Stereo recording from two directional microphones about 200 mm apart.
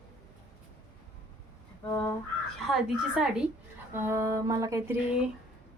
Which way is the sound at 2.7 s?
5° right (ahead or behind).